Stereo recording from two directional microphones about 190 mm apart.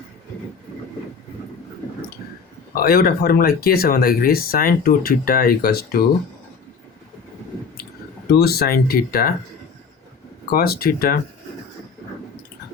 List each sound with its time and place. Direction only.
2.8 s speech: 50° left (ahead or behind)
8.3 s speech: 55° left (ahead or behind)
10.5 s speech: 50° left (ahead or behind)